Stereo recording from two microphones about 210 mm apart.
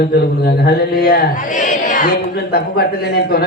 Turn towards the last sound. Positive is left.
turn(degrees=50)  # may be behind; listen again after turning